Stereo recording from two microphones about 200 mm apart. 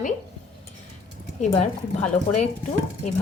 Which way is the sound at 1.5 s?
35° left (ahead or behind).